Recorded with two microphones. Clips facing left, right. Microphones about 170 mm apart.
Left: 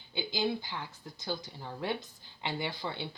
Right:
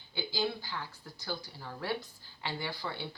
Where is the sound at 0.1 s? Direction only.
20° left (ahead or behind).